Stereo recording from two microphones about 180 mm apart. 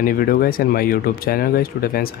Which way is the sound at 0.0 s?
55° left (ahead or behind).